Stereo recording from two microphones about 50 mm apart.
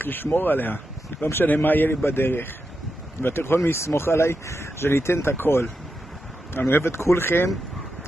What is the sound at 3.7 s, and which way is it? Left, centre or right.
Speech, left.